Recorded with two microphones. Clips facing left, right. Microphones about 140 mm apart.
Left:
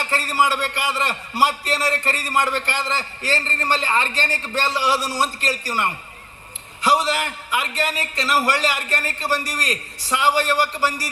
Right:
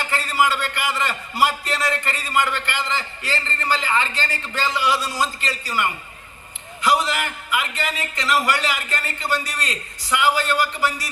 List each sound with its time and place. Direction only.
0.0 s a man's voice: 35° left (ahead or behind)